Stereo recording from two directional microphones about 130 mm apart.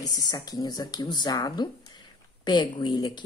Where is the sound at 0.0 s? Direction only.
30° left (ahead or behind).